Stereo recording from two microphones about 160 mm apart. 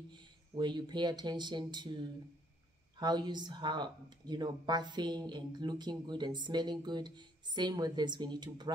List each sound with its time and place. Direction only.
0.1 s speech: 30° right (ahead or behind)